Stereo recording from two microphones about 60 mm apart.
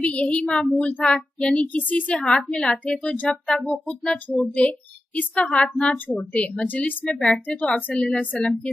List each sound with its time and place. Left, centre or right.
0.0 s a woman's voice: left
7.1 s a woman's voice: centre